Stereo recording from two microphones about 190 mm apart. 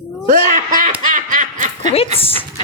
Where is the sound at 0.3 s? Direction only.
45° right (ahead or behind).